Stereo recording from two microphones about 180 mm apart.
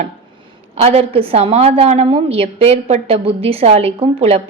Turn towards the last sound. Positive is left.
turn(degrees=-35)  # may be behind; listen again after turning